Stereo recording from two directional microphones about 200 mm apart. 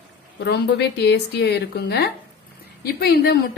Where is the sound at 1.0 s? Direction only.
55° left (ahead or behind).